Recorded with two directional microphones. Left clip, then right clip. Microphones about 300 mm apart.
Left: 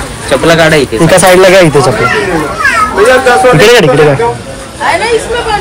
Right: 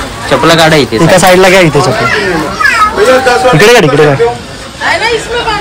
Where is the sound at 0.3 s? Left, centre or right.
Right.